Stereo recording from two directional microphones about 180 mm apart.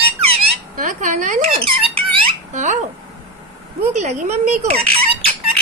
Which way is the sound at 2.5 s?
40° right (ahead or behind).